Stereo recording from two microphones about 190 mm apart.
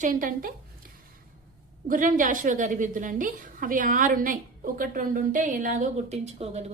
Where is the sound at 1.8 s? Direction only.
45° right (ahead or behind).